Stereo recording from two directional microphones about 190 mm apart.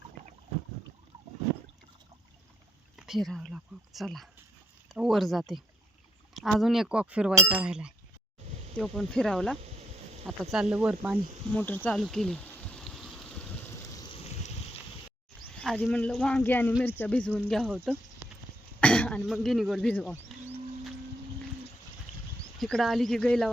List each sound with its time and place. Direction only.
2.9 s speech: centre (ahead or behind)
11.5 s a sound: 10° left (ahead or behind)
13.9 s boat: 25° left (ahead or behind)
15.5 s speech: 5° left (ahead or behind)
18.8 s speech: 5° left (ahead or behind)
22.1 s a sound: centre (ahead or behind)
22.5 s speech: centre (ahead or behind)